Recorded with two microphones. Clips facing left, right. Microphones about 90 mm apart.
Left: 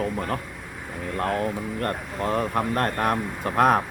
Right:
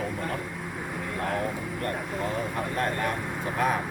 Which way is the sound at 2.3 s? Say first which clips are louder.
Left 8 dB; 65° left (ahead or behind).